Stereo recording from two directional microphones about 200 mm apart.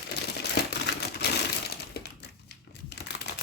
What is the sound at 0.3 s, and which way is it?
Crumpling, 55° left (ahead or behind).